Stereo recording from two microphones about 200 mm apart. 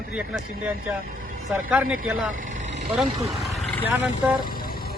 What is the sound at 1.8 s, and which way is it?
Speech, 90° right.